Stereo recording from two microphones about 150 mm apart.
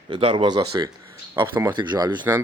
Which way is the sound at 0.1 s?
35° right (ahead or behind).